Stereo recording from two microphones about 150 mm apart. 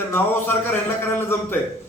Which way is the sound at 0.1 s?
15° left (ahead or behind).